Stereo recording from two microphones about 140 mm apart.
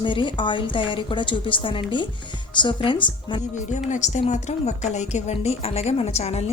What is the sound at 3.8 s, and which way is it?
A woman's voice, 60° left (ahead or behind).